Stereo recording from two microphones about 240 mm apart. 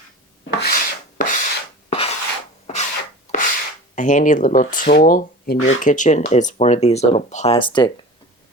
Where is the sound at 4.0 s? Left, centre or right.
Left.